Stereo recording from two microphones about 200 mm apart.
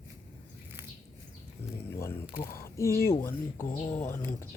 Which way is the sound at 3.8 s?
35° left (ahead or behind).